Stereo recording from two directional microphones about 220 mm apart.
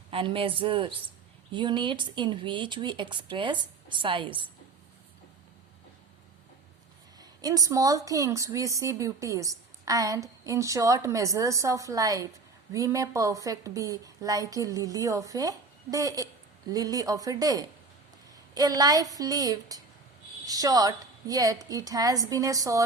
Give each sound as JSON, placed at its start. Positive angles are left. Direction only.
{"t": 0.1, "sound": "speech", "side_deg": -25}
{"t": 7.2, "sound": "a woman's voice", "side_deg": -15}